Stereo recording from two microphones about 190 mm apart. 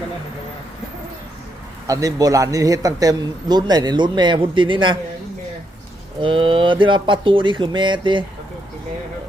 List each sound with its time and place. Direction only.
1.9 s a man's voice: 20° right (ahead or behind)
6.2 s a man's voice: 25° right (ahead or behind)